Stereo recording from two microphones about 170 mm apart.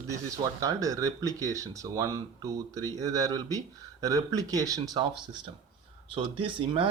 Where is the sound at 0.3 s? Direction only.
20° right (ahead or behind).